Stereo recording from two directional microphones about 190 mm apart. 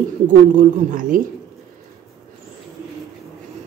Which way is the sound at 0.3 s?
45° right (ahead or behind).